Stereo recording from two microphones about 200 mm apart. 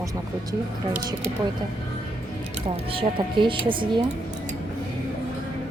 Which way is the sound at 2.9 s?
25° right (ahead or behind).